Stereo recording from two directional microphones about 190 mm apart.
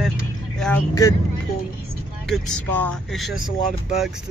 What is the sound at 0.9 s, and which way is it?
Speech, 20° left (ahead or behind).